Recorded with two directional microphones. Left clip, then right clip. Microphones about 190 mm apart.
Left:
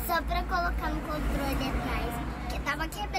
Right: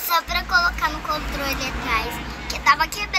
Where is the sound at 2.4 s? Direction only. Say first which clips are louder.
Right 16 dB; 10° left (ahead or behind).